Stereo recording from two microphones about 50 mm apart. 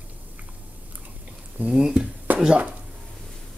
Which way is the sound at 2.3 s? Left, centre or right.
Right.